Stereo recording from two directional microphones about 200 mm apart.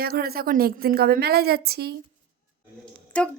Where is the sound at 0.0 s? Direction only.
50° right (ahead or behind).